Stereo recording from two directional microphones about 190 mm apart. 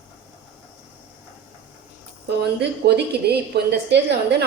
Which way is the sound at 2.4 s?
60° right (ahead or behind).